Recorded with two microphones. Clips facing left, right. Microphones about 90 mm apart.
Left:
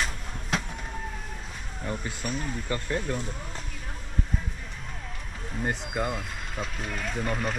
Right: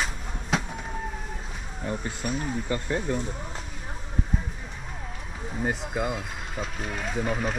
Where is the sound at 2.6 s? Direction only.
20° right (ahead or behind).